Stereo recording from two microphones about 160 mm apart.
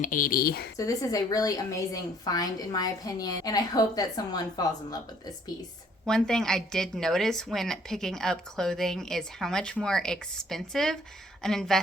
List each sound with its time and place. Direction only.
0.0 s a woman's voice: 60° left (ahead or behind); by 0.7 s 75° left (ahead or behind)
0.8 s a woman's voice: 20° left (ahead or behind)
6.1 s a woman's voice: 5° left (ahead or behind)